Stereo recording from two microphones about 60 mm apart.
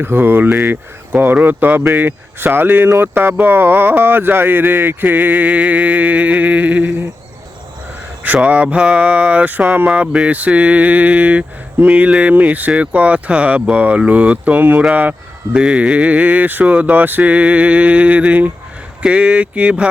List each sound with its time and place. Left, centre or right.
0.0 s speech: right
8.2 s speech: right
15.5 s speech: centre